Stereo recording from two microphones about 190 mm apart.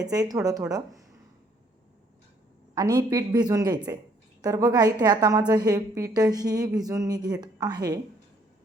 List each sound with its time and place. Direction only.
0.0 s a woman's voice: 20° right (ahead or behind)
2.7 s a woman's voice: 20° right (ahead or behind)